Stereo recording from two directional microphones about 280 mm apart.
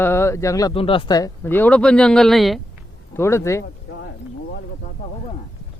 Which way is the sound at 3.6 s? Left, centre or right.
Left.